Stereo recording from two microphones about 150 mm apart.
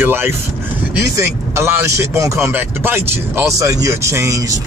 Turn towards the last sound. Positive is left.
turn(degrees=-20)  # may be behind; listen again after turning